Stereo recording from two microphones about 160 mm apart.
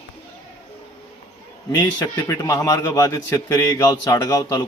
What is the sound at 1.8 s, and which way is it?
A man's voice, 25° left (ahead or behind).